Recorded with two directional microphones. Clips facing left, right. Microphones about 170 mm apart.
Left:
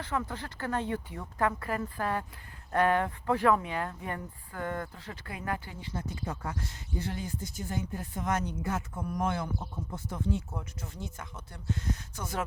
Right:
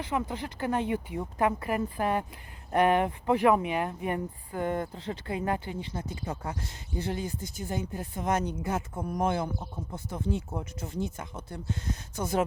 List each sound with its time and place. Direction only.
0.0 s speech: 15° right (ahead or behind)